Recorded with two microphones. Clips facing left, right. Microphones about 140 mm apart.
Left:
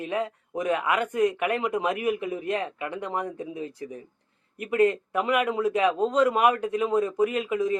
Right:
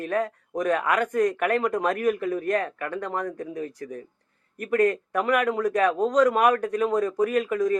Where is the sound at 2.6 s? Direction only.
15° left (ahead or behind).